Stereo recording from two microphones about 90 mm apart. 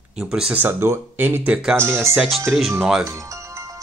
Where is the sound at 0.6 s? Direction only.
30° right (ahead or behind).